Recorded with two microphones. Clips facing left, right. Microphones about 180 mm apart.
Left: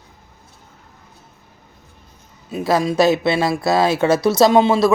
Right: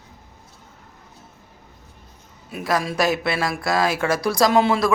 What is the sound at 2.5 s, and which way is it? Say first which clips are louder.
Speech: left 5 dB; 25° left (ahead or behind).